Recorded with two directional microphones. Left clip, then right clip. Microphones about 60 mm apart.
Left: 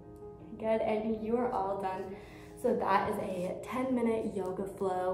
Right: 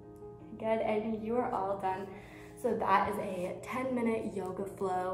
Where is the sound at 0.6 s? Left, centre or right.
Centre.